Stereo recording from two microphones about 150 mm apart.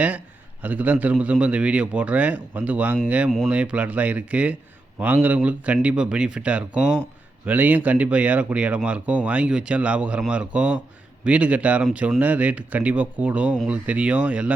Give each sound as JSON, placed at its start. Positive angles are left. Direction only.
{"t": 0.6, "sound": "a man's voice", "side_deg": -10}